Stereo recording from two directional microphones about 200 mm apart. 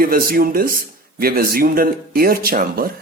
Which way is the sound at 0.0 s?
45° right (ahead or behind).